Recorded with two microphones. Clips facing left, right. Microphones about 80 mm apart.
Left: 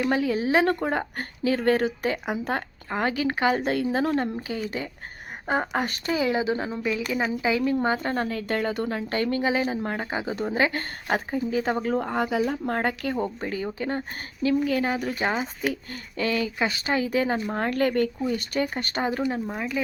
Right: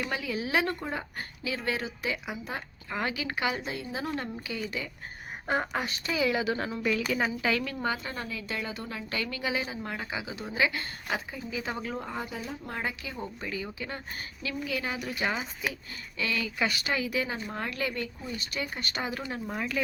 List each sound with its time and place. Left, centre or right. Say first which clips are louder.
0.1 s speech: left 8 dB; left
0.7 s a woman's voice: left 9 dB; left
2.9 s speech: left 7 dB; left
3.7 s a woman's voice: left 10 dB; left
4.1 s speech: left 8 dB; left
6.1 s a woman's voice: left 3 dB; left
7.9 s a woman's voice: left 10 dB; left
15.6 s a woman's voice: left 7 dB; left
19.2 s a woman's voice: left 6 dB; centre